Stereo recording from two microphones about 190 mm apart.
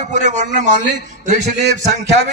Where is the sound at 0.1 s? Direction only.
40° right (ahead or behind).